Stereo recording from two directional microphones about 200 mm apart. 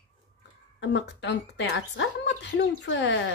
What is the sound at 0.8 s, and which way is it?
Speech, 60° left (ahead or behind).